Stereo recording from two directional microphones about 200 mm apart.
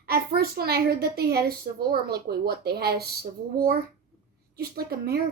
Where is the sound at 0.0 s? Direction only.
50° right (ahead or behind).